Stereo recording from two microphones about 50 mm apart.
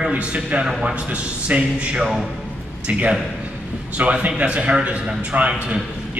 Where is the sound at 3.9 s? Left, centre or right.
Right.